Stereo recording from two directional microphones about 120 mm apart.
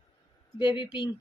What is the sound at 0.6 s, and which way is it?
Speech, 40° left (ahead or behind).